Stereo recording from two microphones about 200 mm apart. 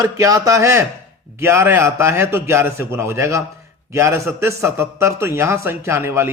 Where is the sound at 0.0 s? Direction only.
15° right (ahead or behind).